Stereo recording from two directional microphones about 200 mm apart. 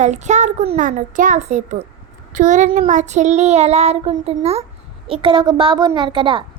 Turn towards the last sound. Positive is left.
turn(degrees=-25)  # may be behind; listen again after turning